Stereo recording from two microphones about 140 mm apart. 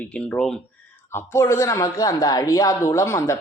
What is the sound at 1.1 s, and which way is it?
A man's voice, 20° left (ahead or behind).